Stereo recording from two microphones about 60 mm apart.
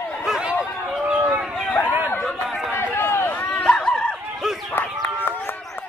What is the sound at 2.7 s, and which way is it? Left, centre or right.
Run, left.